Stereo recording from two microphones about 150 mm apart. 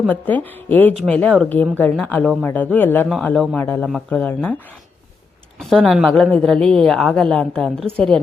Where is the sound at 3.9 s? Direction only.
5° left (ahead or behind).